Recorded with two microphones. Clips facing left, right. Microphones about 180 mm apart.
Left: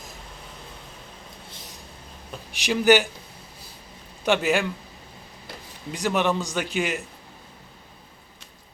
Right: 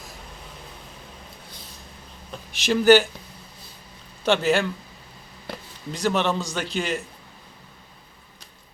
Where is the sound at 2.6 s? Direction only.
15° left (ahead or behind).